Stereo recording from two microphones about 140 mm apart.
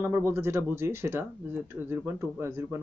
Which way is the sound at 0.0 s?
15° right (ahead or behind).